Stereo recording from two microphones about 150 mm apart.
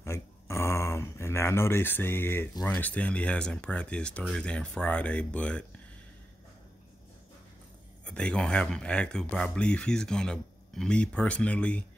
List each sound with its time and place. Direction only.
0.0 s a sound: 15° left (ahead or behind)
2.6 s speech: 10° left (ahead or behind)
8.0 s speech: 5° left (ahead or behind)